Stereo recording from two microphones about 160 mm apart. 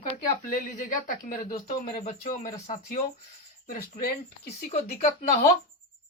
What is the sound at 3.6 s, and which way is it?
Speech, 65° left (ahead or behind).